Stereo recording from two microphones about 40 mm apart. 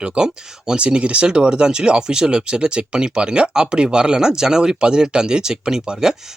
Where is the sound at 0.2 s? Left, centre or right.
Right.